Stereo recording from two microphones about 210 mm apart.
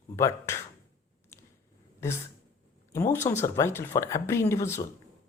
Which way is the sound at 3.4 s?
15° left (ahead or behind).